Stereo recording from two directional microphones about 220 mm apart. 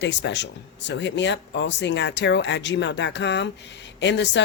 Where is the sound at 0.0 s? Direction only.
55° left (ahead or behind).